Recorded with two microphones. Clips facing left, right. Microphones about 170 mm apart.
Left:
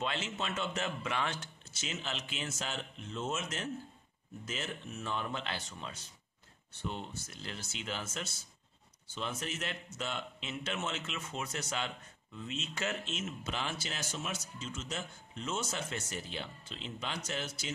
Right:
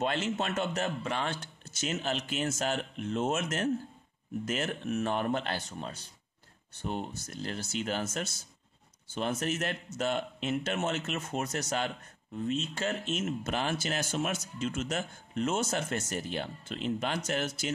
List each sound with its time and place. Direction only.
0.0 s a man's voice: 50° right (ahead or behind)
1.8 s speech: 50° right (ahead or behind)